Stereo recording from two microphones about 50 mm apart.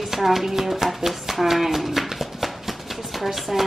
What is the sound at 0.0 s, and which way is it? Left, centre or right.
Speech, centre.